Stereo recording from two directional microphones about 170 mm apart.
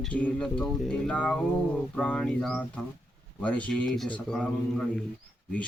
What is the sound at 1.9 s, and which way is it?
Mantra, 5° left (ahead or behind).